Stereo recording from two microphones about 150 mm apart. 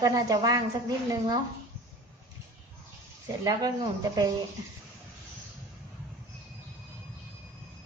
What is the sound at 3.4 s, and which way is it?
Speech, 25° right (ahead or behind).